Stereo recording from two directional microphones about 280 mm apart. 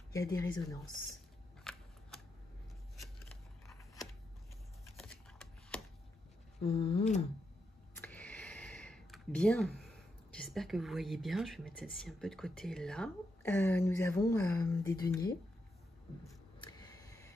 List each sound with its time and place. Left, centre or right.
0.1 s speech: centre
1.6 s shuffling cards: centre
3.6 s a sound: centre
4.9 s shuffling cards: centre
6.6 s speech: centre
7.9 s speech: centre
16.5 s a sound: centre